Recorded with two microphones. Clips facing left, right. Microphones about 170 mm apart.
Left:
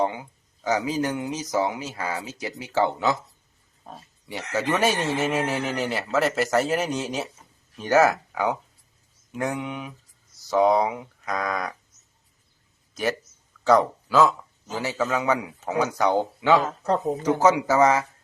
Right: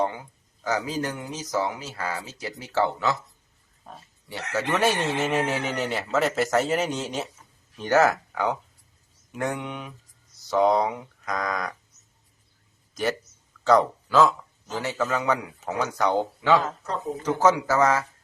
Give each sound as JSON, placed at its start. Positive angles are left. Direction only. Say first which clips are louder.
{"t": 0.0, "sound": "speech", "louder": "left 1 dB", "side_deg": 15}
{"t": 5.2, "sound": "speech", "louder": "even", "side_deg": 0}
{"t": 13.7, "sound": "speech", "louder": "left 1 dB", "side_deg": 5}